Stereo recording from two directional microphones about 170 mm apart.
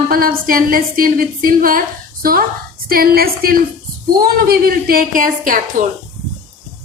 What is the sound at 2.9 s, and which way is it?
A woman's voice, 60° right (ahead or behind).